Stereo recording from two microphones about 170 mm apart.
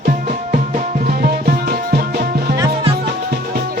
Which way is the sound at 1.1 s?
60° right (ahead or behind).